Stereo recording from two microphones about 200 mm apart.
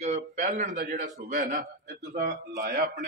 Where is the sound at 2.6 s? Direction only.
45° right (ahead or behind).